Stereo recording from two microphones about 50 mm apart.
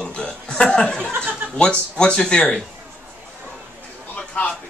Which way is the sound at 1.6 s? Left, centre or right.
Centre.